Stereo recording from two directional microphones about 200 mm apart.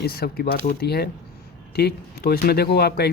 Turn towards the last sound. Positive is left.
turn(degrees=55)  # may be behind; listen again after turning